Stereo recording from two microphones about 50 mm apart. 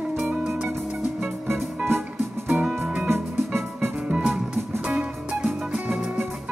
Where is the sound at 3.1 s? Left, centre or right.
Right.